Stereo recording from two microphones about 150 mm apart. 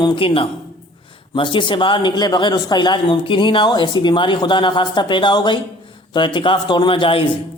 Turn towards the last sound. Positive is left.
turn(degrees=35)  # may be behind; listen again after turning